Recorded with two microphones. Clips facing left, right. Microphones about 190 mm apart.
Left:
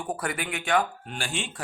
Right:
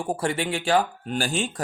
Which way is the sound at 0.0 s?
30° right (ahead or behind).